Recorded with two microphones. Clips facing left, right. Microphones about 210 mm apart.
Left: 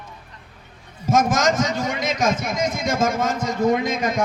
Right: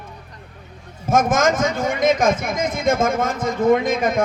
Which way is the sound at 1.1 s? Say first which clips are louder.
Right 2 dB; 50° right (ahead or behind).